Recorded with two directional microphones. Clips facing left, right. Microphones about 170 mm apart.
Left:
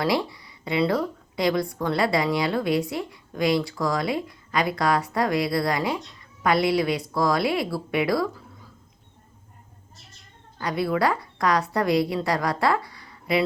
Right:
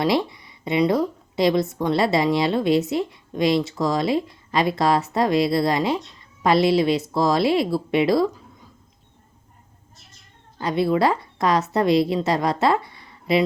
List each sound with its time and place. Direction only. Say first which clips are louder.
0.0 s a woman's voice: right 3 dB; 20° right (ahead or behind)
10.6 s a woman's voice: right 4 dB; 25° right (ahead or behind)